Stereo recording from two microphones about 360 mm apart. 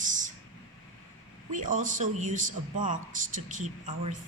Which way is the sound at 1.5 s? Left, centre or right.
Right.